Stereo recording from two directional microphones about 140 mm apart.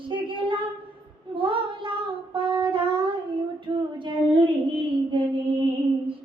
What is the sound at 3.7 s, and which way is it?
Female singing, 35° right (ahead or behind).